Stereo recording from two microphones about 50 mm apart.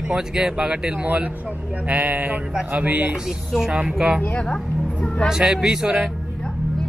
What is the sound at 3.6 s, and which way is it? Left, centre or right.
Speech, centre.